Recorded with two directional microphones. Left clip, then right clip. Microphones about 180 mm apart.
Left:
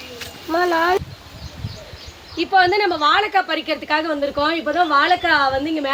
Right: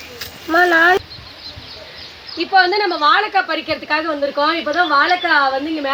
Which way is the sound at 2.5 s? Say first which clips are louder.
Right 1 dB; centre (ahead or behind).